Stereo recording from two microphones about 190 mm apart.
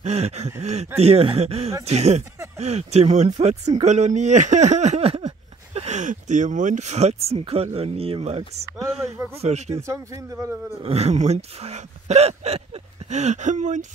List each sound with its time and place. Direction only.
0.0 s a sound: 35° right (ahead or behind)
0.6 s speech: 35° right (ahead or behind)
9.8 s speech: 15° right (ahead or behind)
10.8 s speech: 30° right (ahead or behind)